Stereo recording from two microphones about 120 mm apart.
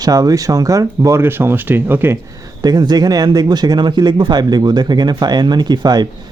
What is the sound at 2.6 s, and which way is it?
Speech, 35° right (ahead or behind).